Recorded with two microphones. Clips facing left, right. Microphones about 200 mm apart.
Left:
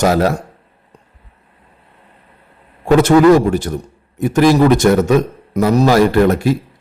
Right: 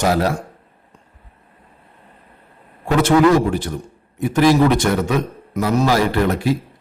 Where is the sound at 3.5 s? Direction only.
45° left (ahead or behind).